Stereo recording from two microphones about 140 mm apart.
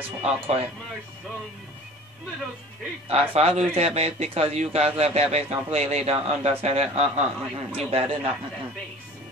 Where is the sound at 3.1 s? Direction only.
50° right (ahead or behind).